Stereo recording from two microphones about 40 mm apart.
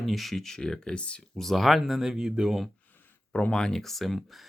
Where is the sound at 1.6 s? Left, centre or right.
Centre.